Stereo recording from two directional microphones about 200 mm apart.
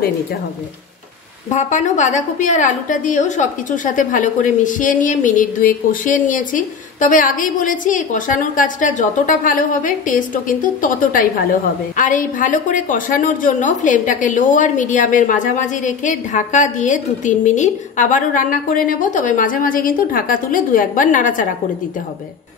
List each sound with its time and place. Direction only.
1.5 s a woman's voice: 35° left (ahead or behind)